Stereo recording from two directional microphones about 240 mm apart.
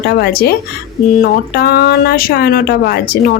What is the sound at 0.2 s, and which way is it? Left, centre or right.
Speech, left.